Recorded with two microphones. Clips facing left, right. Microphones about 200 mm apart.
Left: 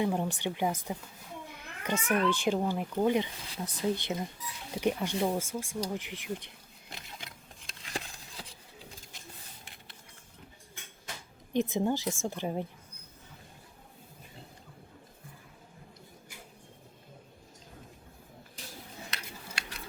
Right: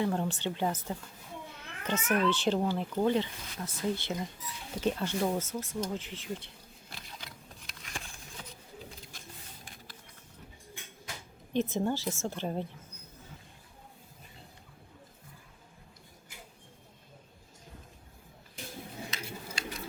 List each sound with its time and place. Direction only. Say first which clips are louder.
0.0 s speech: left 1 dB; 15° left (ahead or behind)
1.5 s children playing: left 1 dB; 10° left (ahead or behind)
2.3 s speech: even; 10° left (ahead or behind)
7.7 s a sound: left 5 dB; 35° left (ahead or behind)
11.5 s speech: left 1 dB; 15° left (ahead or behind)
19.1 s a sound: right 3 dB; 65° left (ahead or behind)